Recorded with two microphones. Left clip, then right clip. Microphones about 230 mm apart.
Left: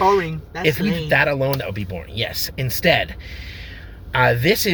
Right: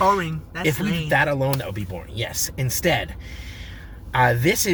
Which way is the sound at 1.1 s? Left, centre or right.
Centre.